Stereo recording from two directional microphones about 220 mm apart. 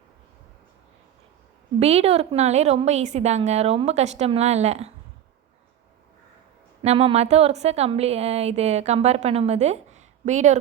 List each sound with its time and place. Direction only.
1.8 s speech: 30° right (ahead or behind)
6.8 s speech: 30° right (ahead or behind)